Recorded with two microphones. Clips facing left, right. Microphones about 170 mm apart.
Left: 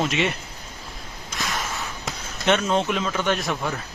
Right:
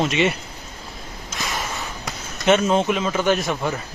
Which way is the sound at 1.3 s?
Centre (ahead or behind).